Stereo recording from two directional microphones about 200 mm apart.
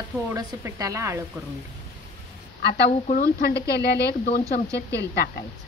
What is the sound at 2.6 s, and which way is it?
Speech, 55° left (ahead or behind).